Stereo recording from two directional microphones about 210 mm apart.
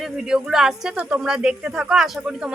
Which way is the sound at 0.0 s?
5° right (ahead or behind).